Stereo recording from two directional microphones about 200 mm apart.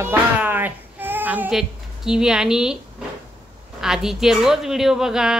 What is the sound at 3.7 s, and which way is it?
Speech, 5° right (ahead or behind).